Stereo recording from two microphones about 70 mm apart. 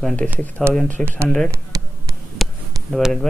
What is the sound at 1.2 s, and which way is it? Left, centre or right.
Speech, centre.